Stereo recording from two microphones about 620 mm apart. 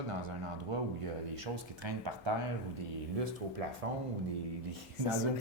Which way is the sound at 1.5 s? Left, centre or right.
Right.